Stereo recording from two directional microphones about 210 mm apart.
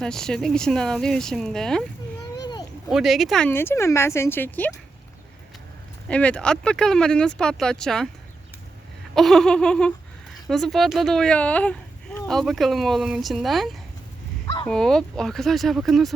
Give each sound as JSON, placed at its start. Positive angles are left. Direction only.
{"t": 0.0, "sound": "speech", "side_deg": 5}
{"t": 2.3, "sound": "a sound", "side_deg": 20}
{"t": 2.9, "sound": "speech", "side_deg": 0}
{"t": 6.1, "sound": "speech", "side_deg": 5}
{"t": 9.1, "sound": "speech", "side_deg": 0}
{"t": 14.7, "sound": "speech", "side_deg": 5}